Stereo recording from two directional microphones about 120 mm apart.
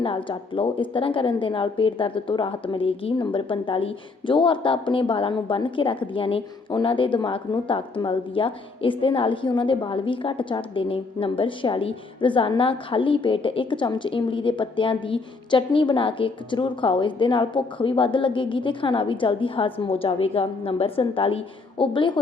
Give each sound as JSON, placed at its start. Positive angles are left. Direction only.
{"t": 0.0, "sound": "a woman's voice", "side_deg": 45}